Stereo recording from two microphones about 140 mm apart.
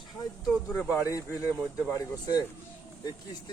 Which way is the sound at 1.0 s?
25° left (ahead or behind).